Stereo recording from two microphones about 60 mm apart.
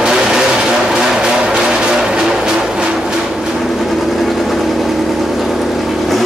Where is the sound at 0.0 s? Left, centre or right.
Centre.